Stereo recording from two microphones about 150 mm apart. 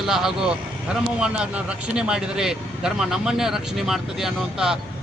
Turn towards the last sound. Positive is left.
turn(degrees=-5)  # may be behind; listen again after turning